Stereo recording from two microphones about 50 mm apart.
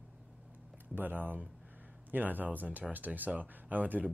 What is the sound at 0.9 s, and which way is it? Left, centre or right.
Speech, right.